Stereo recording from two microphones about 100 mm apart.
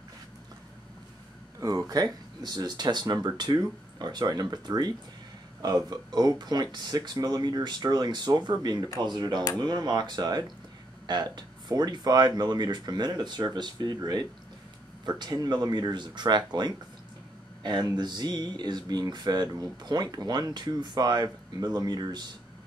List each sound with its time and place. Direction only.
1.6 s speech: 35° right (ahead or behind)